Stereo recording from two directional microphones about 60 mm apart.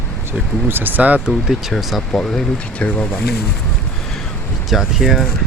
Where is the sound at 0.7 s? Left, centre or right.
Right.